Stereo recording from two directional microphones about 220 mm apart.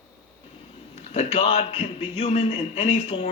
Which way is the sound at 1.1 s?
25° left (ahead or behind).